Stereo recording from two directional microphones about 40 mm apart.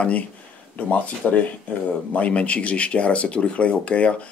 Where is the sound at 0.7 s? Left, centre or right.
Left.